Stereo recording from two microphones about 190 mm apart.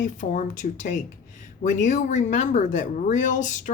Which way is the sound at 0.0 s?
40° left (ahead or behind).